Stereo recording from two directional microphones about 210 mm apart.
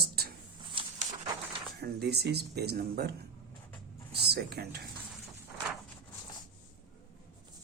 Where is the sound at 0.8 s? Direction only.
25° right (ahead or behind).